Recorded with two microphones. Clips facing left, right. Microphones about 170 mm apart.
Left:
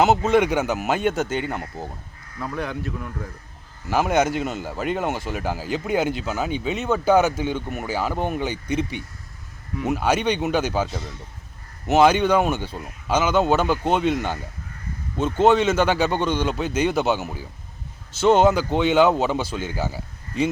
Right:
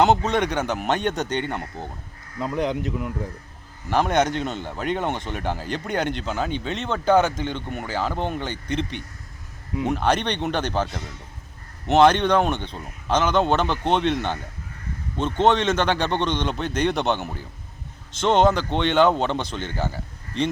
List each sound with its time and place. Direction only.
0.0 s speech: 5° left (ahead or behind)
2.4 s speech: 20° right (ahead or behind)
3.8 s speech: 5° left (ahead or behind)